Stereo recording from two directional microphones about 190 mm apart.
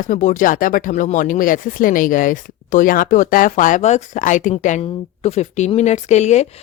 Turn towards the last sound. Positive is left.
turn(degrees=35)  # may be behind; listen again after turning